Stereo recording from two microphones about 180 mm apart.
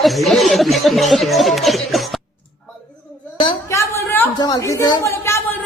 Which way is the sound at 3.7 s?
15° left (ahead or behind).